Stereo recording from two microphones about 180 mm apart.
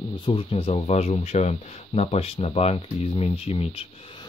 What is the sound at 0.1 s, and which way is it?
Speech, 30° left (ahead or behind).